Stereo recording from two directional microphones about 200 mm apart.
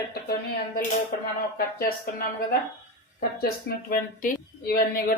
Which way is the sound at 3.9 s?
45° left (ahead or behind).